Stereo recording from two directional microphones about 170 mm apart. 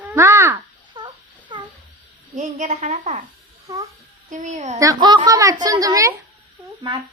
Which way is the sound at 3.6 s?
20° right (ahead or behind).